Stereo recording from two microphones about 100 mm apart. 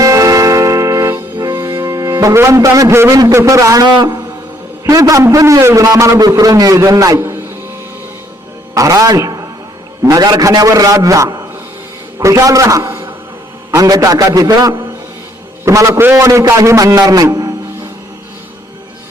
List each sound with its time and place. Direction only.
0.0 s music: 35° right (ahead or behind)
3.3 s a man's voice: 30° right (ahead or behind)
4.9 s a man's voice: 35° right (ahead or behind)
8.7 s a man's voice: 35° right (ahead or behind)